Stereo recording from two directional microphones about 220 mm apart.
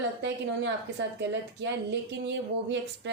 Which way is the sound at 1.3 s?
55° right (ahead or behind).